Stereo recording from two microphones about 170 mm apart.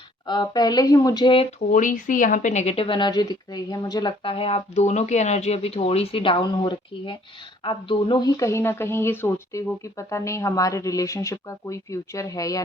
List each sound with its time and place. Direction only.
0.3 s speech: 25° left (ahead or behind)
1.7 s speech: 50° left (ahead or behind); by 12.6 s 20° left (ahead or behind)